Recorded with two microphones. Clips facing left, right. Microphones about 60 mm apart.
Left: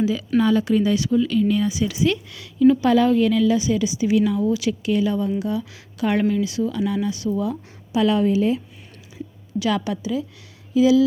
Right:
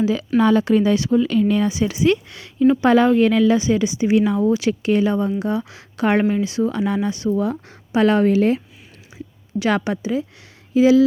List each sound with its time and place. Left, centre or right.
0.0 s a woman's voice: right
9.6 s a woman's voice: right